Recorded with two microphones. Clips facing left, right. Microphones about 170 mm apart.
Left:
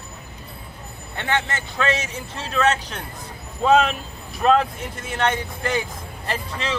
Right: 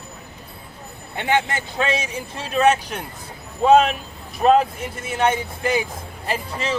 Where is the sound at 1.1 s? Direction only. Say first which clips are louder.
Right 4 dB; 15° right (ahead or behind).